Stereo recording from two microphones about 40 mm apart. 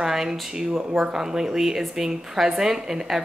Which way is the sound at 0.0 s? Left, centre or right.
Centre.